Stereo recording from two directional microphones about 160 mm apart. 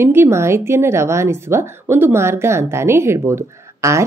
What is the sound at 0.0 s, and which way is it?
A woman's voice, 15° right (ahead or behind).